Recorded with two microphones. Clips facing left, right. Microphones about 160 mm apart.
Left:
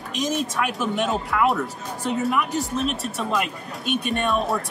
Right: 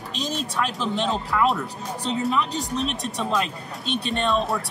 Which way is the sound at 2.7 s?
5° left (ahead or behind).